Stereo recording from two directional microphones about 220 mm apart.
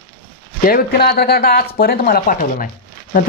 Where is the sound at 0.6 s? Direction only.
45° left (ahead or behind).